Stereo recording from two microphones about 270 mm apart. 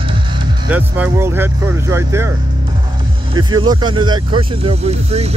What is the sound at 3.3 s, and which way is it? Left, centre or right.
Speech, centre.